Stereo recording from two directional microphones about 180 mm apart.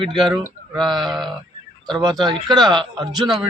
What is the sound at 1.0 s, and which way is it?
Speech, centre (ahead or behind).